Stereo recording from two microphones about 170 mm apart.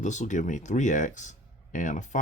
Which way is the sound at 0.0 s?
45° left (ahead or behind).